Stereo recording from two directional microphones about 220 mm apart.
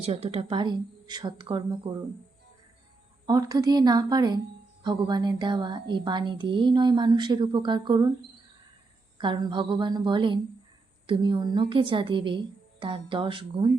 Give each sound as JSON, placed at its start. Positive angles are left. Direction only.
{"t": 0.0, "sound": "a woman's voice", "side_deg": -30}
{"t": 3.2, "sound": "a woman's voice", "side_deg": -15}
{"t": 9.1, "sound": "a woman's voice", "side_deg": -20}